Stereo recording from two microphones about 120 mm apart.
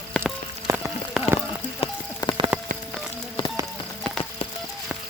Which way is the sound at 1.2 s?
5° right (ahead or behind).